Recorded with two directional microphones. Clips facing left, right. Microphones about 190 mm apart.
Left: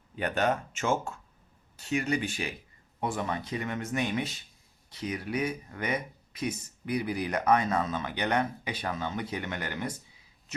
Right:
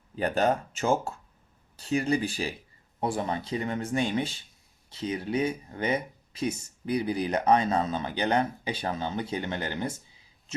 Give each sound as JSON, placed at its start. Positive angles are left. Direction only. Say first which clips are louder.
{"t": 0.2, "sound": "speech", "louder": "right 3 dB", "side_deg": -35}